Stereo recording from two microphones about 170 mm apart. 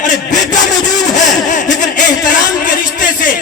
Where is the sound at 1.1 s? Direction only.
45° left (ahead or behind).